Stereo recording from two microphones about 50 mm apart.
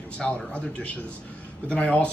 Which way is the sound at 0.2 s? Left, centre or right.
Left.